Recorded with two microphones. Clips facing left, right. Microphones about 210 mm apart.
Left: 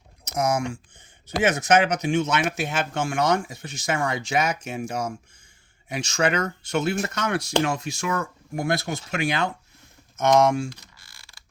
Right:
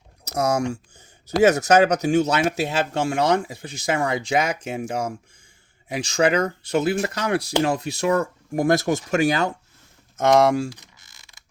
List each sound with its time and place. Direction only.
0.3 s speech: 40° right (ahead or behind)
10.8 s mechanisms: 20° right (ahead or behind)